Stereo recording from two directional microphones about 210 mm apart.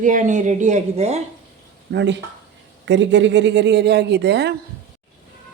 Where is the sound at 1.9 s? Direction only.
55° right (ahead or behind).